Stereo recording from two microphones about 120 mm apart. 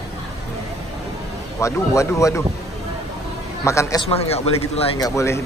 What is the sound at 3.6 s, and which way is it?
Speech, 25° left (ahead or behind).